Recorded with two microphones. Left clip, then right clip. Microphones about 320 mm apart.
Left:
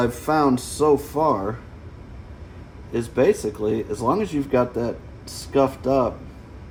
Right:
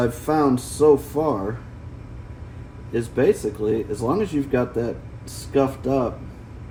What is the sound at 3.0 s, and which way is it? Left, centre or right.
Speech, centre.